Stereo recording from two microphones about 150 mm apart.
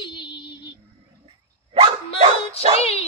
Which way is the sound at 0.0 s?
30° left (ahead or behind).